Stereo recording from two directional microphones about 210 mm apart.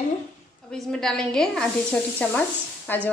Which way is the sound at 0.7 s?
Centre (ahead or behind).